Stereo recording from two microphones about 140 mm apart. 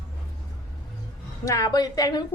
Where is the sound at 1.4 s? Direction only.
25° left (ahead or behind).